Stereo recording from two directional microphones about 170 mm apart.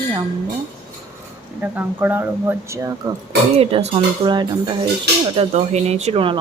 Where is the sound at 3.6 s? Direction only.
35° right (ahead or behind).